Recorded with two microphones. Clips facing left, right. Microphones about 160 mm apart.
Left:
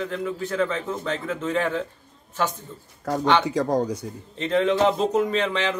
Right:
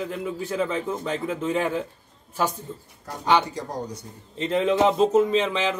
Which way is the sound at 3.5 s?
90° left.